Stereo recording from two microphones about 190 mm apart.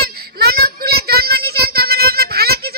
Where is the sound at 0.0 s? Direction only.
55° right (ahead or behind).